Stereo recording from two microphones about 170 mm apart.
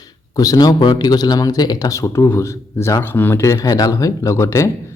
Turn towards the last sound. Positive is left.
turn(degrees=15)  # may be behind; listen again after turning